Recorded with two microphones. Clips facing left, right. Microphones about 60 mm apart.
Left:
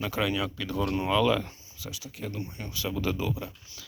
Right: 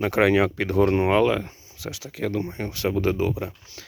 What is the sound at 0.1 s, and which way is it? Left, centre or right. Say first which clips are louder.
Speech: right 13 dB; right.